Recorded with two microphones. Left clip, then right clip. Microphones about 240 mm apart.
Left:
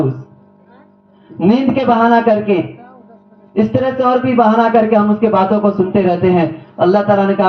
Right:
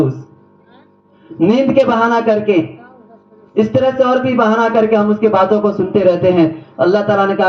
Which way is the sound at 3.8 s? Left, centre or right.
Right.